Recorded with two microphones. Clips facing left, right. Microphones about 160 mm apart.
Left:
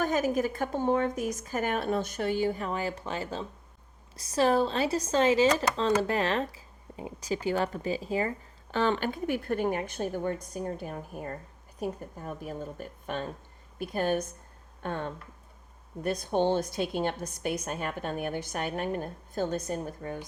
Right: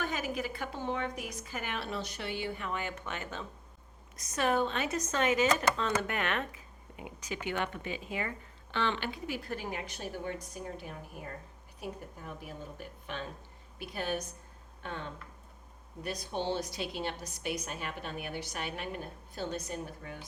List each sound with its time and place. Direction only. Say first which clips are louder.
0.0 s a woman's voice: left 8 dB; 40° left (ahead or behind)